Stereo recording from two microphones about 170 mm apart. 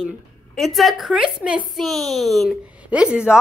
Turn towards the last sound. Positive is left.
turn(degrees=-5)  # may be behind; listen again after turning